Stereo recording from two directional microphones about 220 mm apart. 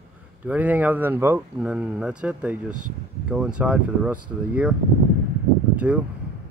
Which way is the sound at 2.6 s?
90° right.